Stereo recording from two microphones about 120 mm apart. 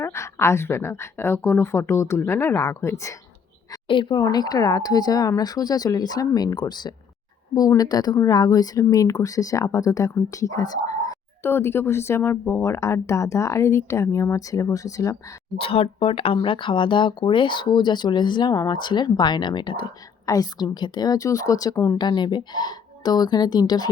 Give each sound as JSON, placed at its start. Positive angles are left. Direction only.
{"t": 0.0, "sound": "speech", "side_deg": 20}
{"t": 3.8, "sound": "speech", "side_deg": 40}
{"t": 11.5, "sound": "speech", "side_deg": 20}
{"t": 15.5, "sound": "speech", "side_deg": 50}